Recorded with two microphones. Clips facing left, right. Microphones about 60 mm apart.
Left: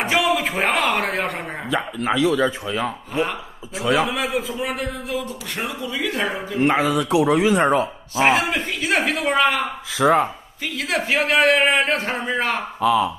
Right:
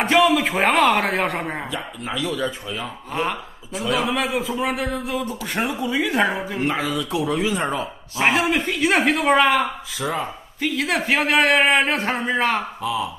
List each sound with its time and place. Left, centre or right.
0.0 s a man's voice: centre
1.7 s speech: left
3.2 s a man's voice: centre
5.7 s speech: centre
6.6 s speech: left
7.1 s speech: left
7.8 s a man's voice: centre
10.0 s speech: left
10.6 s a man's voice: centre